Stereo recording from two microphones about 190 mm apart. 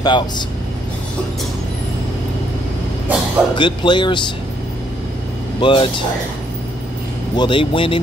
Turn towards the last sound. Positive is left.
turn(degrees=25)  # may be behind; listen again after turning